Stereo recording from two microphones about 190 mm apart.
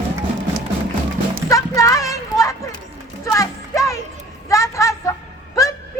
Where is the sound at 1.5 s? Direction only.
15° left (ahead or behind).